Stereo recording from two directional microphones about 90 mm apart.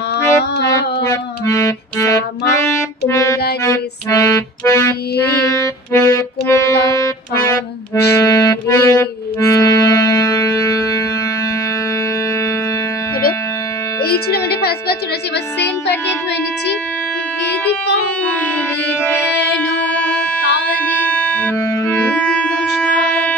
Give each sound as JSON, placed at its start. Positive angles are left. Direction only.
{"t": 0.7, "sound": "music", "side_deg": 35}
{"t": 5.9, "sound": "music", "side_deg": 25}
{"t": 8.7, "sound": "accordion", "side_deg": 30}
{"t": 18.9, "sound": "music", "side_deg": 25}
{"t": 21.0, "sound": "music", "side_deg": 20}
{"t": 21.5, "sound": "music", "side_deg": 30}
{"t": 23.0, "sound": "shofar", "side_deg": 15}